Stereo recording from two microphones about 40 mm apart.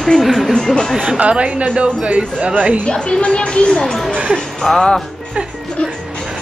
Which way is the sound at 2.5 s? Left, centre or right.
Right.